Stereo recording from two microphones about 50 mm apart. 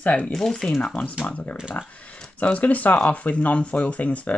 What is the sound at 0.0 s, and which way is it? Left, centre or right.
Speech, left.